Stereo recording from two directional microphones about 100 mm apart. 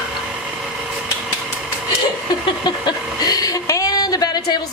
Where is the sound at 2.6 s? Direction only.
45° left (ahead or behind).